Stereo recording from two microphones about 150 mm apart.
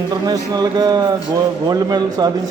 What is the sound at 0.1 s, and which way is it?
Speech, 25° right (ahead or behind).